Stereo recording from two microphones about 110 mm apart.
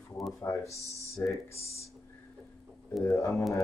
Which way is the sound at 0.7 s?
30° right (ahead or behind).